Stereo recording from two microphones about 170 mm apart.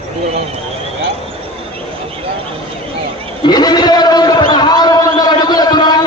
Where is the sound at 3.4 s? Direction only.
25° left (ahead or behind).